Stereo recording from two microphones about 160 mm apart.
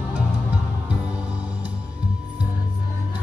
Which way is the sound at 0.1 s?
10° right (ahead or behind).